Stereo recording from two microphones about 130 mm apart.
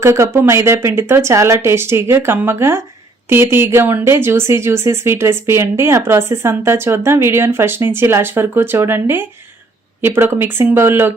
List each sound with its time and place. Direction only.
0.0 s speech: 20° right (ahead or behind)